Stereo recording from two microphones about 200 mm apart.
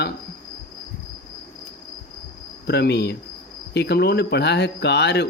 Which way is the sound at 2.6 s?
55° left (ahead or behind).